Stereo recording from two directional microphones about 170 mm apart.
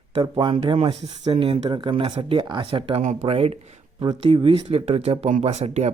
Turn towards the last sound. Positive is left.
turn(degrees=-40)  # may be behind; listen again after turning